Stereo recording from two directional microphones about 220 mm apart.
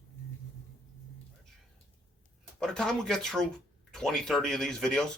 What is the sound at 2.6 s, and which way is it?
Speech, 5° left (ahead or behind).